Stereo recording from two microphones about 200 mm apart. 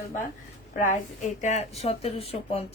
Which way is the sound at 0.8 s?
35° left (ahead or behind).